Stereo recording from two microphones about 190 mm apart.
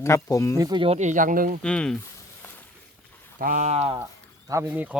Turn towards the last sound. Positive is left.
turn(degrees=-10)  # may be behind; listen again after turning